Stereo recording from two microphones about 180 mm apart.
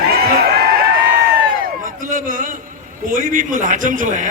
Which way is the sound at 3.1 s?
50° right (ahead or behind).